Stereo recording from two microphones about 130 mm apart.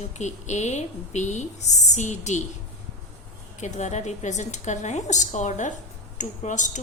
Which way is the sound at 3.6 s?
65° left (ahead or behind).